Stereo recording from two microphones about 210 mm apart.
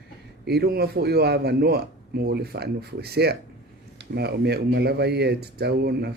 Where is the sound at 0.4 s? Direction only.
50° right (ahead or behind).